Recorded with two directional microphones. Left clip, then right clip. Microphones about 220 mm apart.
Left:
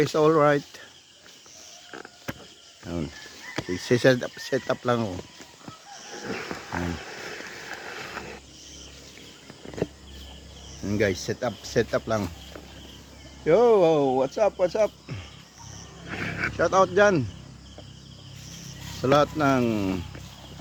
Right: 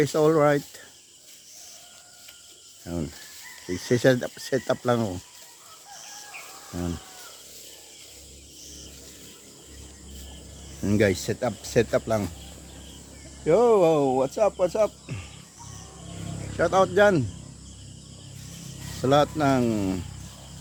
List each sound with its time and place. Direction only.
0.0 s speech: centre (ahead or behind)
2.8 s speech: centre (ahead or behind)
10.8 s speech: 40° right (ahead or behind); by 12.0 s 20° right (ahead or behind)
12.0 s speech: 5° right (ahead or behind)
13.4 s speech: 5° left (ahead or behind)
16.6 s speech: centre (ahead or behind)
19.0 s speech: 5° right (ahead or behind)